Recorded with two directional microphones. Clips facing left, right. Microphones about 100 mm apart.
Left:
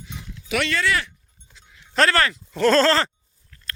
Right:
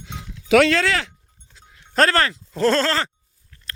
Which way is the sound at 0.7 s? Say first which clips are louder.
Right 3 dB; 90° right.